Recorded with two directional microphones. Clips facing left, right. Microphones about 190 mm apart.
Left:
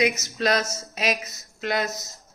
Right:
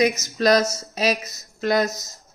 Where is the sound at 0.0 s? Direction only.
40° right (ahead or behind).